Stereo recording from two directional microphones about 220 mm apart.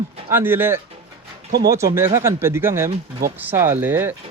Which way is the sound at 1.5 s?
45° right (ahead or behind).